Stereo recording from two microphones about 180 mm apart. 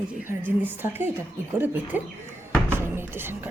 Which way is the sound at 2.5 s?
10° right (ahead or behind).